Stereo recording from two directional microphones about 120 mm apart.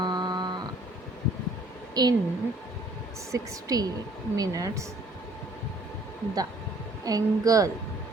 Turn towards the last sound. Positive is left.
turn(degrees=-30)  # may be behind; listen again after turning